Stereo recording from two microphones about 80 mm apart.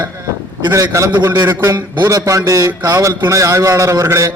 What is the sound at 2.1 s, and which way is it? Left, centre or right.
A man's voice, right.